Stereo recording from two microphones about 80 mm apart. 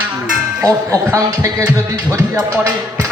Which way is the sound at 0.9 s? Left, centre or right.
Right.